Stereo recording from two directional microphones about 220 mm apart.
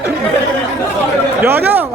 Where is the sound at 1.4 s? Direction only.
10° right (ahead or behind).